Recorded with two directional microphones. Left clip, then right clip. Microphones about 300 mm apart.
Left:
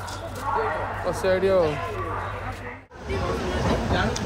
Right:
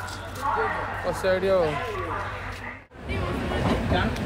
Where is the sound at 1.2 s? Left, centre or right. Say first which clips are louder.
Left 2 dB; centre.